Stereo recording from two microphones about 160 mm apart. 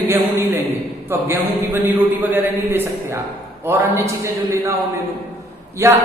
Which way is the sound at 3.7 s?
20° right (ahead or behind).